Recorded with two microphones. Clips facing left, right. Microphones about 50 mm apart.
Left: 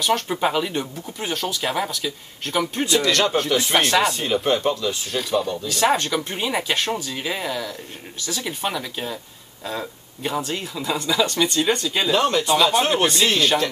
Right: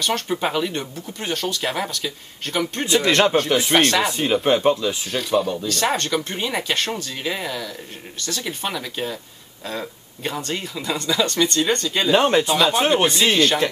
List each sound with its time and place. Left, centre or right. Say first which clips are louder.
0.0 s speech: left 2 dB; centre
2.9 s speech: right 4 dB; right
3.7 s speech: right 1 dB; centre
4.0 s speech: right 1 dB; centre
5.1 s speech: right 2 dB; centre
5.7 s speech: left 1 dB; centre
12.1 s speech: right 4 dB; right
12.4 s speech: even; centre